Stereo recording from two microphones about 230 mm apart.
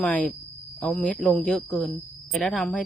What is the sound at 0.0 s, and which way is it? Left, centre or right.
Speech, centre.